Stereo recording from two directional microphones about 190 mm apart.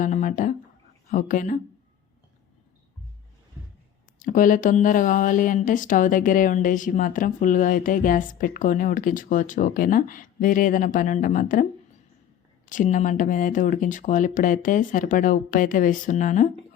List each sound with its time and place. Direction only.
0.0 s a sound: 40° left (ahead or behind)
1.1 s speech: 45° left (ahead or behind)
4.2 s speech: 45° left (ahead or behind)
12.6 s speech: 40° left (ahead or behind)